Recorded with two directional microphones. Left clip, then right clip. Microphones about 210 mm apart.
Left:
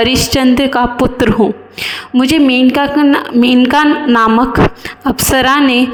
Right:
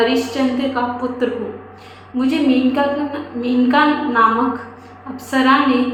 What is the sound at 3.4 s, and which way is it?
Speech, 60° left (ahead or behind).